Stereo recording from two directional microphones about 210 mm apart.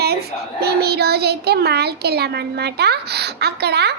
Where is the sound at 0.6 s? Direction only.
50° right (ahead or behind).